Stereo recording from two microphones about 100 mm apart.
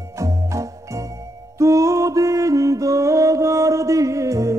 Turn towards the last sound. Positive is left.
turn(degrees=-30)  # may be behind; listen again after turning